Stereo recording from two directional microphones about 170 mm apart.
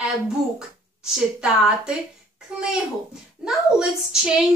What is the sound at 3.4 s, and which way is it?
Speech, 5° right (ahead or behind).